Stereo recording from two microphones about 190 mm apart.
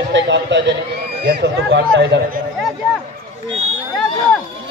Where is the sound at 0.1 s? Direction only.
70° right (ahead or behind).